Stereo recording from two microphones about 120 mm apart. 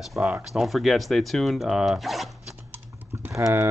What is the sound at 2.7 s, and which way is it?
Typing, 20° right (ahead or behind).